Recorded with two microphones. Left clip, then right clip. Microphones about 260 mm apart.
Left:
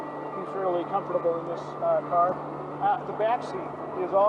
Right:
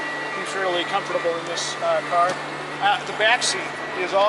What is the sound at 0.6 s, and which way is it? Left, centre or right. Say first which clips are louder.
Speech: right 4 dB; centre.